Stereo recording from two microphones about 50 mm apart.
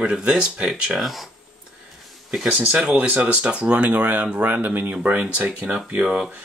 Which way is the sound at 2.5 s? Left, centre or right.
Right.